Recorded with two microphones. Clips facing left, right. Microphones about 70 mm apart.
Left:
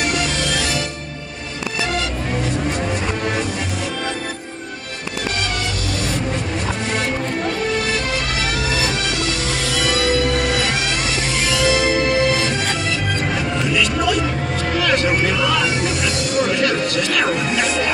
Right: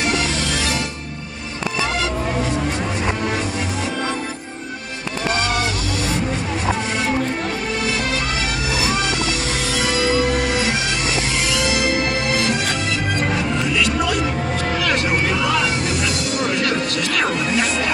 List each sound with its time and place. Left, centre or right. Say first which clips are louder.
9.8 s music: even; right
15.4 s music: left 1 dB; right